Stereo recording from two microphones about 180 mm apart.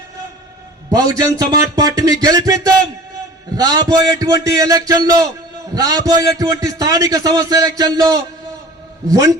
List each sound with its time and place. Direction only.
0.9 s a man's voice: 20° right (ahead or behind)
3.6 s a man's voice: 20° right (ahead or behind)